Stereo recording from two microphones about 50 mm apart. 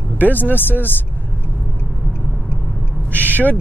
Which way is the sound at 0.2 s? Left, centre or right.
Left.